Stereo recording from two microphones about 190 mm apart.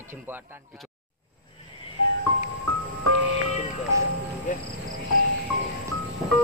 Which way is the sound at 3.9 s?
15° right (ahead or behind).